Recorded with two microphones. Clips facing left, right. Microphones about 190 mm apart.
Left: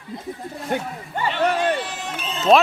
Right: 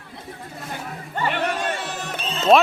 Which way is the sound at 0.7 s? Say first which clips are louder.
Left 11 dB; 65° left (ahead or behind).